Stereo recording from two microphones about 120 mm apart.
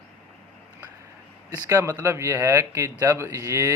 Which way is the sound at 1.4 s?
25° right (ahead or behind).